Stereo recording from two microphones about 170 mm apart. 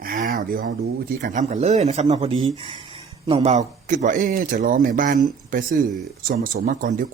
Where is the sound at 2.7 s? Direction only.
30° right (ahead or behind).